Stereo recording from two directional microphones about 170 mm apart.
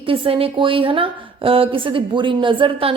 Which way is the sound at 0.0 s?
35° right (ahead or behind).